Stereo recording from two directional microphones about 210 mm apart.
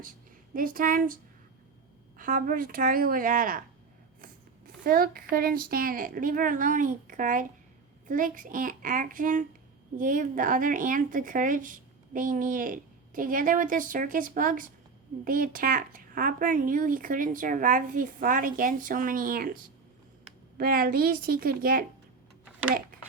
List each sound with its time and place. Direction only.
0.5 s speech: 40° right (ahead or behind)
4.2 s zipper: 45° right (ahead or behind)
5.3 s speech: 45° right (ahead or behind)
20.6 s a woman's voice: 45° right (ahead or behind)